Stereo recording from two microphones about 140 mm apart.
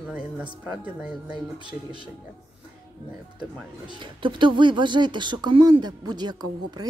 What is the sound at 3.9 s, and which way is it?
Speech, 35° right (ahead or behind).